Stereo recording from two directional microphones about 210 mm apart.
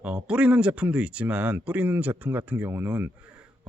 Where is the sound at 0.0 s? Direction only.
5° right (ahead or behind).